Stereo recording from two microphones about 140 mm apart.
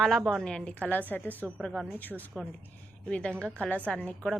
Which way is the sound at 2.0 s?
10° left (ahead or behind).